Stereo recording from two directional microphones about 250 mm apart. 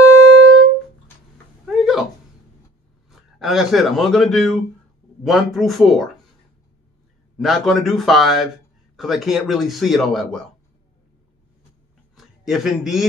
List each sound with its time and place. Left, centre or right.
0.3 s music: right
1.7 s a sound: centre
3.1 s a man's voice: centre
7.3 s a man's voice: centre
12.2 s a man's voice: centre